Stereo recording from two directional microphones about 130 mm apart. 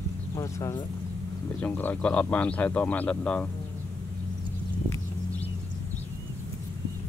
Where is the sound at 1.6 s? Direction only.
10° left (ahead or behind).